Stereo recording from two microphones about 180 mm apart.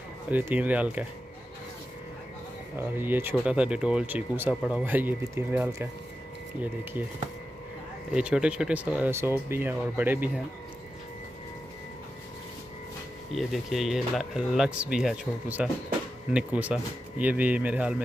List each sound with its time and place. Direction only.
0.3 s speech: 10° right (ahead or behind)
2.7 s speech: 10° right (ahead or behind)
8.1 s speech: 5° right (ahead or behind)
13.3 s speech: centre (ahead or behind)